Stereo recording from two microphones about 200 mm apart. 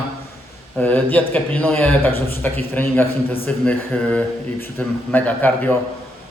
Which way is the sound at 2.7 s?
10° left (ahead or behind).